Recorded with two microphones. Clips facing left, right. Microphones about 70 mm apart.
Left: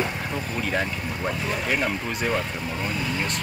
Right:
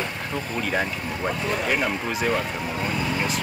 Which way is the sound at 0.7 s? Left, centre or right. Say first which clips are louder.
Right 1 dB; centre.